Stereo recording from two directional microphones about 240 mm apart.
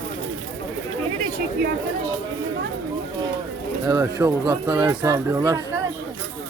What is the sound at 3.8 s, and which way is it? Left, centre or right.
Speech, centre.